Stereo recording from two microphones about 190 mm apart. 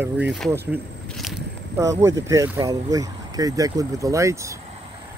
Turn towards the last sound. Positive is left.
turn(degrees=-15)  # may be behind; listen again after turning